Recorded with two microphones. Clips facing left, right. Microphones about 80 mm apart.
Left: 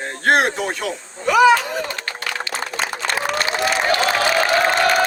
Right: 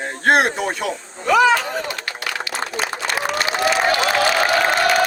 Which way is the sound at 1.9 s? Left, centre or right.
Left.